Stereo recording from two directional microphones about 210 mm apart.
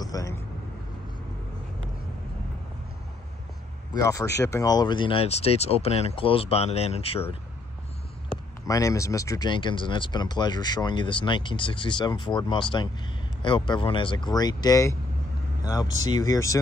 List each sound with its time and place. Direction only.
0.0 s vehicle: 15° left (ahead or behind)
3.9 s speech: 15° left (ahead or behind)
8.6 s speech: 15° left (ahead or behind)